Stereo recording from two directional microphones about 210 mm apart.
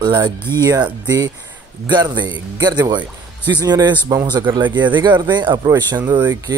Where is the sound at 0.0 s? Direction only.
20° right (ahead or behind).